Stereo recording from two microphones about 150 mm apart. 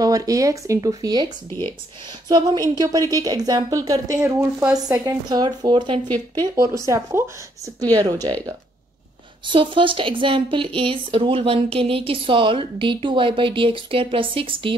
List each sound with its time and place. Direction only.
0.0 s speech: 25° right (ahead or behind)
1.5 s speech: 15° left (ahead or behind)
2.2 s speech: 25° right (ahead or behind)
5.3 s speech: 25° right (ahead or behind)
9.5 s speech: 35° right (ahead or behind)